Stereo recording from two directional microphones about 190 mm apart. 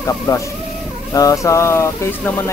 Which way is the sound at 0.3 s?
20° left (ahead or behind).